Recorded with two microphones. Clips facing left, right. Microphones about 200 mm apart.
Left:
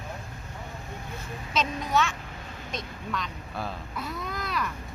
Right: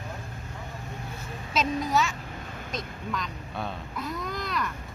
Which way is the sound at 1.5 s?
5° right (ahead or behind).